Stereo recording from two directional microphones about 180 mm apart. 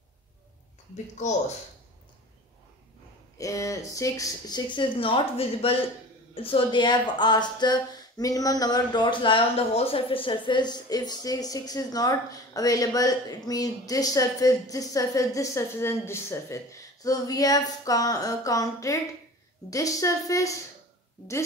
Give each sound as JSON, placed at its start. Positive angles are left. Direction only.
{"t": 3.3, "sound": "speech", "side_deg": 20}